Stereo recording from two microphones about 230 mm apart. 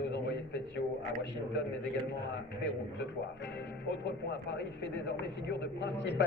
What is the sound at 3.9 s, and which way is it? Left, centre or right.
A man's voice, left.